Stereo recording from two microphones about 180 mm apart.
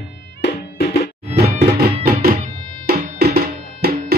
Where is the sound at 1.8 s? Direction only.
60° right (ahead or behind).